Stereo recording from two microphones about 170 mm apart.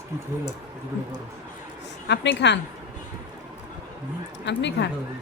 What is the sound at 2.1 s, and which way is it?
Speech, 90° left.